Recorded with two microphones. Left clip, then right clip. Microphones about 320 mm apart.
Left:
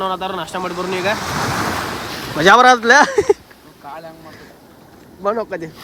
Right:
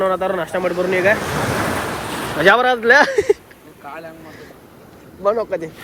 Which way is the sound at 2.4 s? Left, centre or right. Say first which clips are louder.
Left 4 dB; centre.